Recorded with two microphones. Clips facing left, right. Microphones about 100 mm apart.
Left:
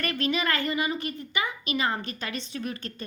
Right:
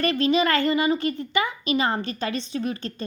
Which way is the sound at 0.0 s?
25° right (ahead or behind).